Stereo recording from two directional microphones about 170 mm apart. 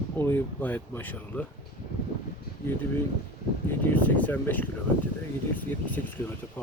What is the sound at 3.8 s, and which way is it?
Speech, 10° left (ahead or behind).